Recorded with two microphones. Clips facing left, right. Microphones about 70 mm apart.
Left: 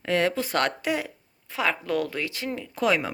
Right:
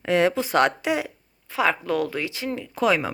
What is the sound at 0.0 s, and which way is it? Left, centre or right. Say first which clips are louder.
Speech: right 4 dB; centre.